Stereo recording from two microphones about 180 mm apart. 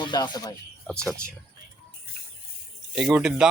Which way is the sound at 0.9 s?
5° left (ahead or behind).